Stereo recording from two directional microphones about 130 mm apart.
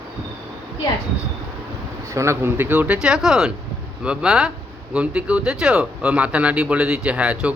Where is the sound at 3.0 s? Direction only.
5° right (ahead or behind).